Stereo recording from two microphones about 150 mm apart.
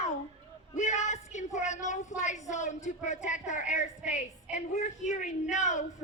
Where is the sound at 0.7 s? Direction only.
50° left (ahead or behind).